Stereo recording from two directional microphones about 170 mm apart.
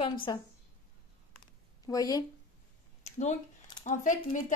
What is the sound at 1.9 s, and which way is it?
Speech, 20° left (ahead or behind).